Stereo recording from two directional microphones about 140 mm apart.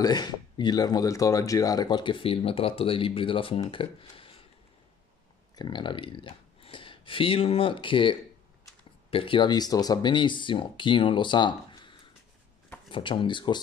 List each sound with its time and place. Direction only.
0.0 s speech: 30° left (ahead or behind)
5.6 s speech: 35° left (ahead or behind)